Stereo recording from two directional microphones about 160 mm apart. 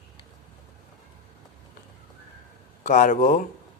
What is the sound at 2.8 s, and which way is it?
Speech, 50° left (ahead or behind).